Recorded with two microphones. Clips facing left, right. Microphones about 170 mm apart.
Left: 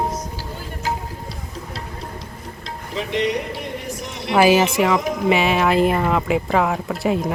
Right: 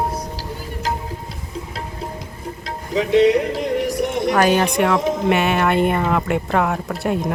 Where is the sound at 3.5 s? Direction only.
90° right.